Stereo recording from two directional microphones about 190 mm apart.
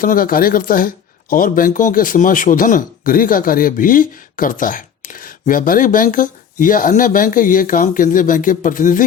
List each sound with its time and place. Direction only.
0.0 s speech: 50° left (ahead or behind)